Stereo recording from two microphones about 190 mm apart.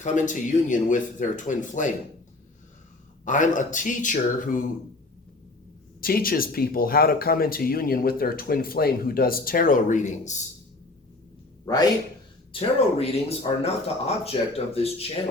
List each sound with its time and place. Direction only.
0.0 s speech: 40° left (ahead or behind)
3.2 s speech: 40° left (ahead or behind)
6.0 s speech: 50° left (ahead or behind)
11.6 s a man's voice: 20° left (ahead or behind)
12.5 s speech: 30° left (ahead or behind)